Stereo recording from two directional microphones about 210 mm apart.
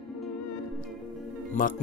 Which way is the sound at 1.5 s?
40° left (ahead or behind).